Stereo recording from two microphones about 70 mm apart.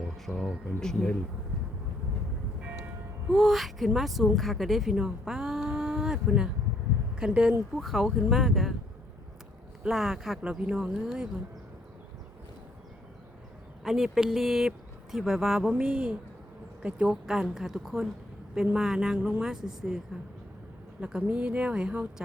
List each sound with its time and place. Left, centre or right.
0.3 s speech: left
0.8 s speech: centre
2.6 s music: centre
3.3 s a woman's voice: centre
7.8 s a woman's voice: centre
9.9 s a woman's voice: centre
13.8 s a woman's voice: centre
21.0 s speech: centre